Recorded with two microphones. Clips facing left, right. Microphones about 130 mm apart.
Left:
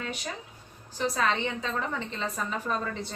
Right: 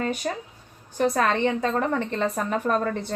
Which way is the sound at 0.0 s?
45° right (ahead or behind).